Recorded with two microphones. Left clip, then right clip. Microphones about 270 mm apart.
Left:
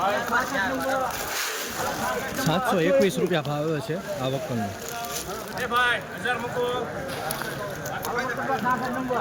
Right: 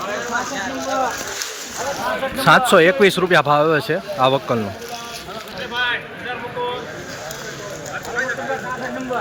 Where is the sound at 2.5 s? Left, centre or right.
Centre.